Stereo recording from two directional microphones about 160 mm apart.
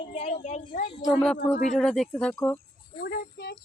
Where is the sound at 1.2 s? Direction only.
5° left (ahead or behind).